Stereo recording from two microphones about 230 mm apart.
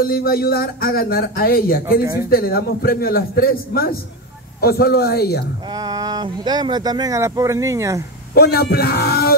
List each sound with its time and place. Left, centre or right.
0.0 s speech: left
5.8 s speech: centre
8.4 s speech: left